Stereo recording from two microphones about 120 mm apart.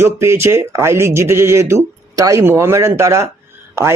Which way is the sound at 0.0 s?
20° right (ahead or behind).